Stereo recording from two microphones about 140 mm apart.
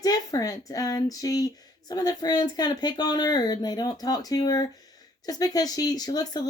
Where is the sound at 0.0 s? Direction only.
25° left (ahead or behind).